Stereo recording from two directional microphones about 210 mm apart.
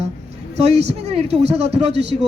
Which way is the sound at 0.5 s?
30° right (ahead or behind).